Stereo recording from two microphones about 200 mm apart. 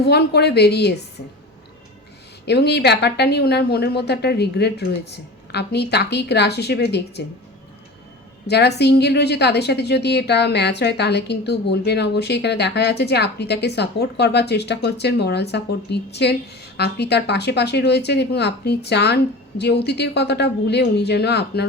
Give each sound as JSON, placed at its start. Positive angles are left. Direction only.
{"t": 0.0, "sound": "a woman's voice", "side_deg": 55}
{"t": 2.5, "sound": "a woman's voice", "side_deg": 55}
{"t": 8.4, "sound": "a woman's voice", "side_deg": 55}